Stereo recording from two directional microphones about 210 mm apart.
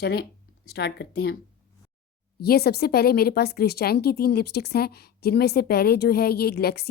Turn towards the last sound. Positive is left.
turn(degrees=50)  # may be behind; listen again after turning